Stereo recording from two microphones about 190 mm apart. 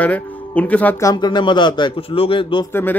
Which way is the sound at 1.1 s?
25° left (ahead or behind).